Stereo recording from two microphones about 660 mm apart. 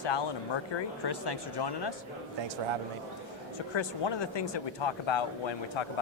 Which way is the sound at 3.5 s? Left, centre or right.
Left.